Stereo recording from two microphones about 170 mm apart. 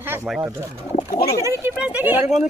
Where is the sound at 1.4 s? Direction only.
10° right (ahead or behind).